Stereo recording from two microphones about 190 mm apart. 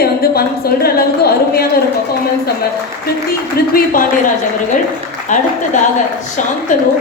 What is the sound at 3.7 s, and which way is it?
Speech, 45° left (ahead or behind).